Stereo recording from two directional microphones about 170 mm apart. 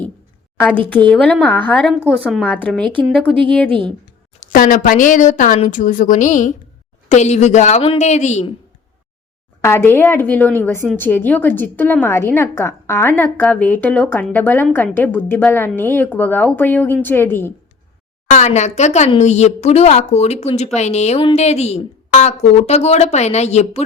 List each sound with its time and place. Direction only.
0.5 s a woman's voice: 5° left (ahead or behind)
3.7 s a woman's voice: 30° right (ahead or behind)
4.4 s speech: 50° left (ahead or behind)
9.6 s a woman's voice: 15° left (ahead or behind)
18.3 s speech: 45° left (ahead or behind)